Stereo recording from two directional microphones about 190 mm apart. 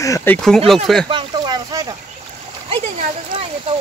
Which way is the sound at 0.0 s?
15° left (ahead or behind).